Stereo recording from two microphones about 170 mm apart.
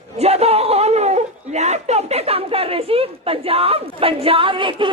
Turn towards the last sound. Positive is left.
turn(degrees=-30)  # may be behind; listen again after turning